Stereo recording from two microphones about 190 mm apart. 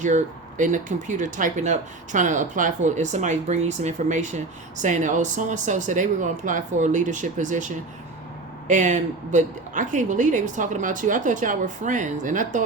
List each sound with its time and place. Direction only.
0.0 s speech: 40° right (ahead or behind)